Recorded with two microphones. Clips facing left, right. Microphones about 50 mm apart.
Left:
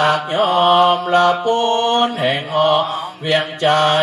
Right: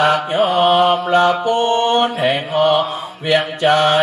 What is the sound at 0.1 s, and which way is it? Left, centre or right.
Mantra, centre.